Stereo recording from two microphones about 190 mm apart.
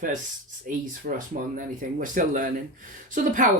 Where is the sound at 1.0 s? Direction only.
45° right (ahead or behind).